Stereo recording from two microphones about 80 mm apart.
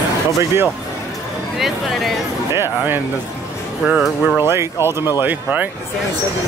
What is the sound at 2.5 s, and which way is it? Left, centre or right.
Speech, right.